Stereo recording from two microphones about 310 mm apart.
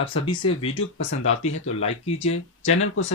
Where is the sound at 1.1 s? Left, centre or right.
Left.